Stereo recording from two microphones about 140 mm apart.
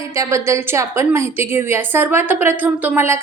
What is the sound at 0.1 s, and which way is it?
A woman's voice, 20° right (ahead or behind).